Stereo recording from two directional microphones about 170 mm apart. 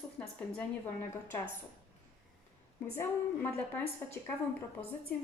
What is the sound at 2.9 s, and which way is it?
Speech, 10° left (ahead or behind).